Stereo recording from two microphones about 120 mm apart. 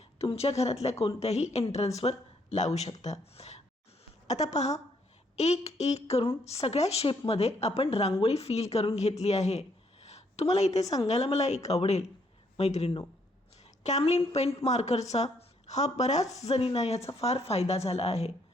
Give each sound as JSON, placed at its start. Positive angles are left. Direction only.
{"t": 0.2, "sound": "a woman's voice", "side_deg": 55}